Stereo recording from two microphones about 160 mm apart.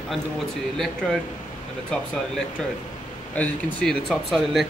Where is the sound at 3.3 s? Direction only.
5° left (ahead or behind).